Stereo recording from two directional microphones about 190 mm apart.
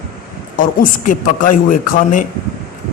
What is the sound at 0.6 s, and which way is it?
Speech, 45° left (ahead or behind).